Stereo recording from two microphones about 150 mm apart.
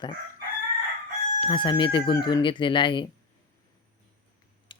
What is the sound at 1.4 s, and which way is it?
Speech, 35° left (ahead or behind).